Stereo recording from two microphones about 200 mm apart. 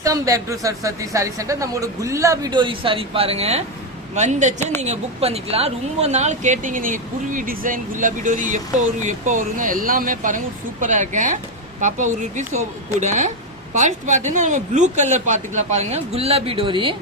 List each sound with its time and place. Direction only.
0.0 s speech: 15° right (ahead or behind)